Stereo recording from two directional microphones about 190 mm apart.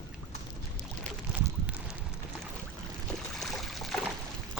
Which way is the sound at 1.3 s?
5° right (ahead or behind).